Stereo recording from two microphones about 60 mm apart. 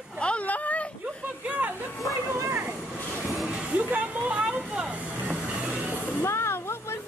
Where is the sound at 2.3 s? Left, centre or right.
Right.